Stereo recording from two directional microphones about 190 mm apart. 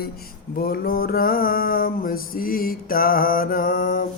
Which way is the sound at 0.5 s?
55° left (ahead or behind).